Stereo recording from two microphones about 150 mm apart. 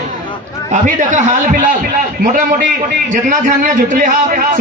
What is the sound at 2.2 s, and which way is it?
Speech, 75° right (ahead or behind).